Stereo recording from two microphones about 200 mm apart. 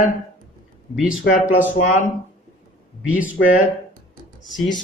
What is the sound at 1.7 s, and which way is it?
Speech, 40° left (ahead or behind).